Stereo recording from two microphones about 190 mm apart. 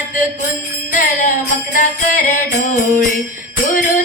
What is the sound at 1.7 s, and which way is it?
Jingle bell, 40° left (ahead or behind).